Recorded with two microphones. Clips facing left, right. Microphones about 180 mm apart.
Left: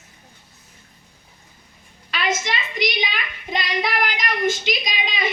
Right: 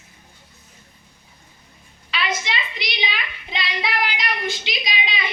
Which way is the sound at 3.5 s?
45° left (ahead or behind).